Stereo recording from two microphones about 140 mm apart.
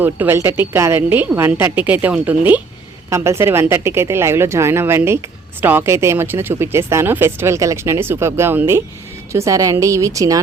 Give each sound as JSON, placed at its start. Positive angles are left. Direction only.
{"t": 0.0, "sound": "a woman's voice", "side_deg": -15}